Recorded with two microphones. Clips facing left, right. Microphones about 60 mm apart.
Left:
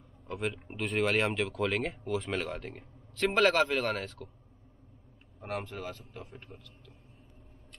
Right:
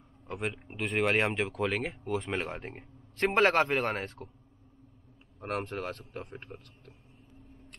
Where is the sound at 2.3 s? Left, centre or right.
Centre.